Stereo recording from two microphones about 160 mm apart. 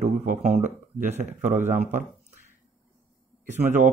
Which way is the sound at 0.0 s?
50° right (ahead or behind).